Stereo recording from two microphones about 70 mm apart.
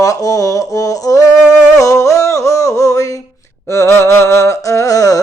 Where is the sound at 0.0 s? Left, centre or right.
Left.